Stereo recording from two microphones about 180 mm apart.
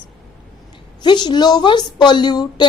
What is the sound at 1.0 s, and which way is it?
A woman's voice, 25° left (ahead or behind).